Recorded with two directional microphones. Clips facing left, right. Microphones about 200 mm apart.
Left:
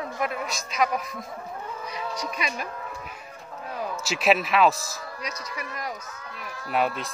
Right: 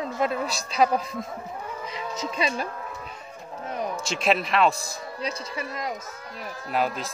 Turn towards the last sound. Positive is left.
turn(degrees=0)  # may be behind; listen again after turning